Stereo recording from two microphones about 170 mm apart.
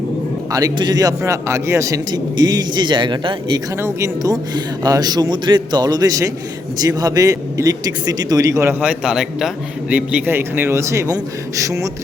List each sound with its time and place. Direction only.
0.5 s a man's voice: 20° right (ahead or behind)